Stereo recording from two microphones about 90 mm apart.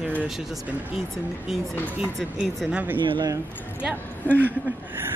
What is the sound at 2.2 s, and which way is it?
Speech, 5° left (ahead or behind).